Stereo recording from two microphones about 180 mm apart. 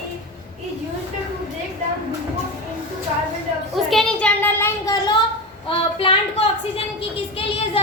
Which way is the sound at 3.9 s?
5° left (ahead or behind).